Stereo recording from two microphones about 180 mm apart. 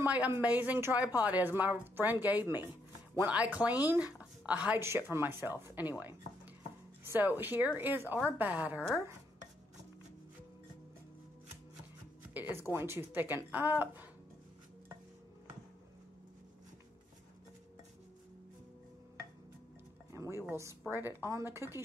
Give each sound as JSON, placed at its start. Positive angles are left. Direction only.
{"t": 0.0, "sound": "a woman's voice", "side_deg": -10}
{"t": 12.4, "sound": "a woman's voice", "side_deg": -10}
{"t": 20.1, "sound": "music", "side_deg": -15}
{"t": 20.4, "sound": "a woman's voice", "side_deg": -15}